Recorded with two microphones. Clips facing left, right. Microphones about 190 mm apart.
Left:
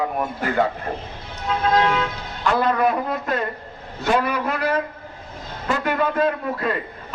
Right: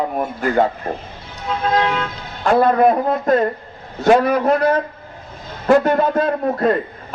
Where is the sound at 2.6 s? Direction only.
45° right (ahead or behind).